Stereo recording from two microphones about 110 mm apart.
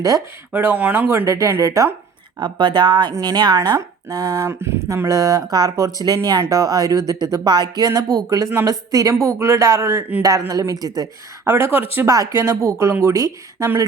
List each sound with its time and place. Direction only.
0.5 s a woman's voice: 15° right (ahead or behind)
2.4 s a woman's voice: 45° right (ahead or behind)
11.4 s a woman's voice: 20° right (ahead or behind)
12.0 s a woman's voice: 30° right (ahead or behind)